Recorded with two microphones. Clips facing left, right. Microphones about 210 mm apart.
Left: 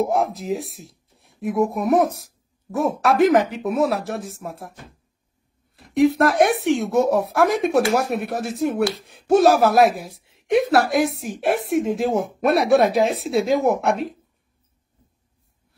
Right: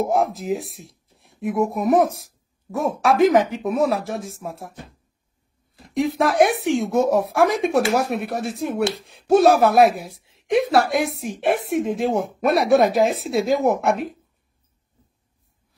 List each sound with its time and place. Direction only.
0.0 s speech: centre (ahead or behind)
5.8 s speech: centre (ahead or behind)